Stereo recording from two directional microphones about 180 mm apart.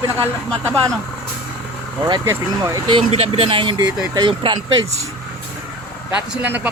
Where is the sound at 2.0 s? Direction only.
15° right (ahead or behind).